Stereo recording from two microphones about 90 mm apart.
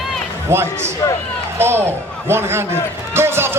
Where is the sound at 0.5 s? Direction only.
30° right (ahead or behind).